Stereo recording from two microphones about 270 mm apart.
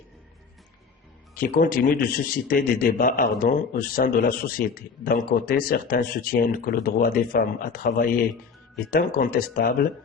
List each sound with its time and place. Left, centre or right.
1.4 s a man's voice: left